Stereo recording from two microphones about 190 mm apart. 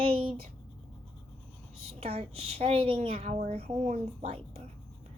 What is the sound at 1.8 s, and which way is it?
A woman's voice, 30° right (ahead or behind).